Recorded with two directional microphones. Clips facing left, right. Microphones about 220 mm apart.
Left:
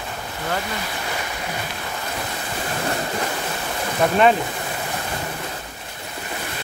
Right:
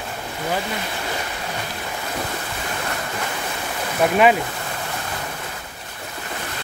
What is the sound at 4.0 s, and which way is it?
Speech, 10° right (ahead or behind).